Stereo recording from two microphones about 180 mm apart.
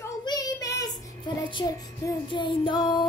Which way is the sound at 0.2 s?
20° left (ahead or behind).